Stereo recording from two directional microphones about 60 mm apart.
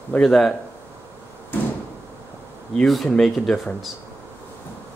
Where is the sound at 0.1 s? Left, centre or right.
Centre.